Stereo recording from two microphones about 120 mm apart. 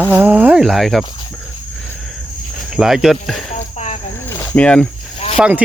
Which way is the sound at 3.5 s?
80° left.